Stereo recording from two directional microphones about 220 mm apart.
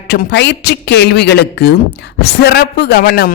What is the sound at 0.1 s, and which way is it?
Speech, 50° left (ahead or behind).